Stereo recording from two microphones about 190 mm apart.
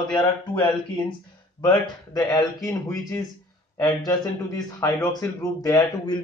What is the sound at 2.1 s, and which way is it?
A man's voice, 20° left (ahead or behind).